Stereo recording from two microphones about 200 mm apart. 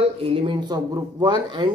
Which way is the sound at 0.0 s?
25° right (ahead or behind).